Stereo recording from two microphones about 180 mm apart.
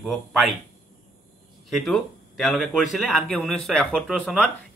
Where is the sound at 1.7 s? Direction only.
Centre (ahead or behind).